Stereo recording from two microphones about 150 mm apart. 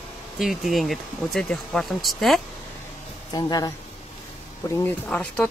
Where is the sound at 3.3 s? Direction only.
25° left (ahead or behind).